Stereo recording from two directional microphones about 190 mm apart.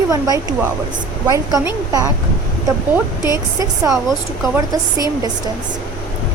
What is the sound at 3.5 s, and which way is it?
Speech, 20° right (ahead or behind).